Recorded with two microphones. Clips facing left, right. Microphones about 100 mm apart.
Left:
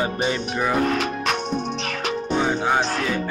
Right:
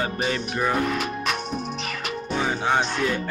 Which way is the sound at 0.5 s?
5° left (ahead or behind).